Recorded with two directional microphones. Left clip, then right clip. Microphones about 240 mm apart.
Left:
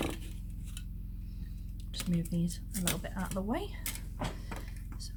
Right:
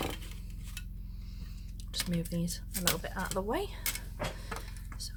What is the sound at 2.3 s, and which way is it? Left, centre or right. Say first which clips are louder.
Speech: right 1 dB; right.